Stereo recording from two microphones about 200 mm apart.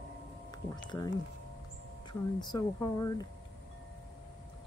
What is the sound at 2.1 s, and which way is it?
Speech, 20° left (ahead or behind).